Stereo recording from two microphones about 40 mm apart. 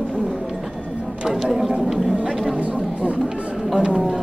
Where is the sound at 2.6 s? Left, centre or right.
Right.